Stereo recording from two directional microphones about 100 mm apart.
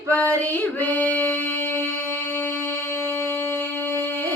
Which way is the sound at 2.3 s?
25° left (ahead or behind).